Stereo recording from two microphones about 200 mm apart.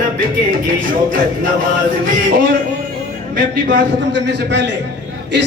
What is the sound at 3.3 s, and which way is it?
A man's voice, 45° right (ahead or behind).